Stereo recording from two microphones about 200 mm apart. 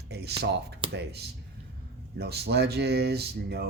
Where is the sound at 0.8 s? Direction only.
25° right (ahead or behind).